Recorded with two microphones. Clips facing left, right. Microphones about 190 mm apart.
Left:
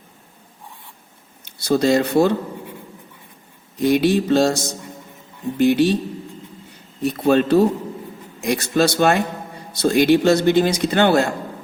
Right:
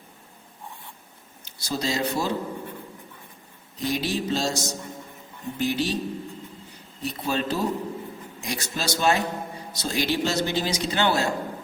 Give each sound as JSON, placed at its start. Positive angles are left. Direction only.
{"t": 1.5, "sound": "speech", "side_deg": 60}
{"t": 3.8, "sound": "a man's voice", "side_deg": 60}
{"t": 7.0, "sound": "a man's voice", "side_deg": 55}